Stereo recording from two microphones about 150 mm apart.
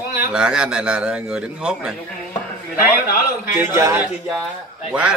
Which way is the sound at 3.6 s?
15° right (ahead or behind).